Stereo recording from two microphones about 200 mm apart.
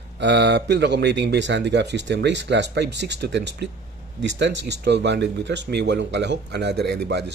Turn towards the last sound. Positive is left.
turn(degrees=-55)  # may be behind; listen again after turning